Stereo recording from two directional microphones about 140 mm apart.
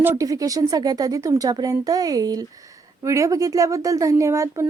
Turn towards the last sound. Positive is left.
turn(degrees=-20)  # may be behind; listen again after turning